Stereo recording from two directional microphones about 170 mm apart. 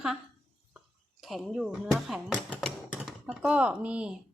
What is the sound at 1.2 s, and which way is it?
Speech, centre (ahead or behind).